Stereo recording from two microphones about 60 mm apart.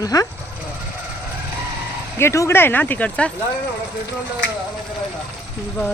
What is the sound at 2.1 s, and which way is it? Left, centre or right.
Speech, left.